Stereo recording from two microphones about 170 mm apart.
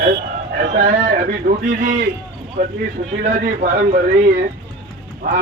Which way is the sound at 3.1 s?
50° right (ahead or behind).